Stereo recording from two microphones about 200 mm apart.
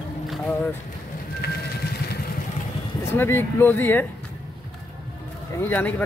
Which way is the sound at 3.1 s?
10° left (ahead or behind).